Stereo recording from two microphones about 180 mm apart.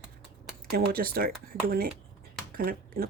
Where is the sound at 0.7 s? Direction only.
55° right (ahead or behind).